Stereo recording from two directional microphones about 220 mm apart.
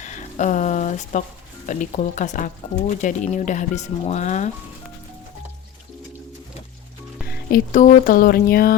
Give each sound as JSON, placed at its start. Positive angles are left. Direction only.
{"t": 0.0, "sound": "speech", "side_deg": 35}
{"t": 7.3, "sound": "speech", "side_deg": 40}